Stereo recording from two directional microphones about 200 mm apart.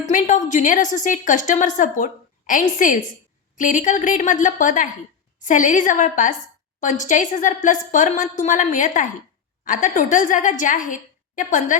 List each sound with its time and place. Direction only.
0.0 s a woman's voice: 40° left (ahead or behind)